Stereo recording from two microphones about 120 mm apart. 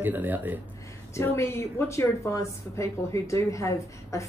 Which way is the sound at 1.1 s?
25° left (ahead or behind).